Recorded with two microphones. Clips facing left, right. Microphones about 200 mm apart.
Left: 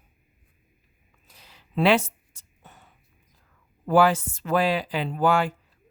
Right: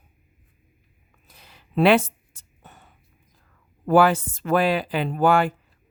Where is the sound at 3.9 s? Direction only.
55° right (ahead or behind).